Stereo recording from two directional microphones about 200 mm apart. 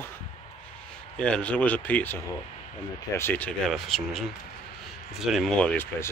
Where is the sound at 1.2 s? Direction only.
5° left (ahead or behind).